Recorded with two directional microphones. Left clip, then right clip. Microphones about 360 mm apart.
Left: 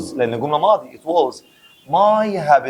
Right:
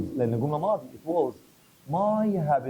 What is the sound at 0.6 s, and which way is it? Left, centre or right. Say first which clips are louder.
Speech: left 12 dB; left.